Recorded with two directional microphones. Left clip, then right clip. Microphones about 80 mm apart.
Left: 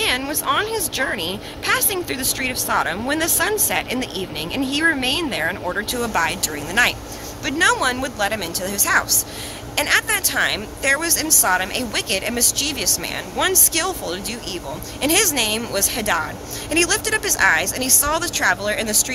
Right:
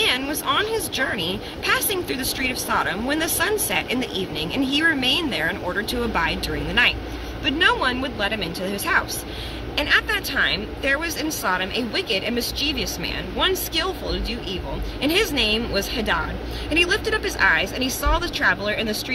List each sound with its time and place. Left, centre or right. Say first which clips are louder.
0.3 s speech: left 1 dB; centre